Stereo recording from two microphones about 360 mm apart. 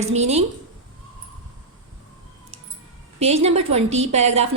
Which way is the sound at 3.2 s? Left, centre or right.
Centre.